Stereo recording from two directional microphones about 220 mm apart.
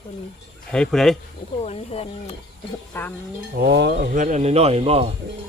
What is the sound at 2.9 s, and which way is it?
Speech, 10° left (ahead or behind).